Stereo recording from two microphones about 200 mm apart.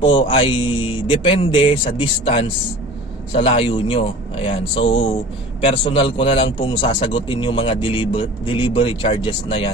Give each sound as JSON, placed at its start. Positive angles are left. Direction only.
{"t": 0.0, "sound": "a man's voice", "side_deg": 25}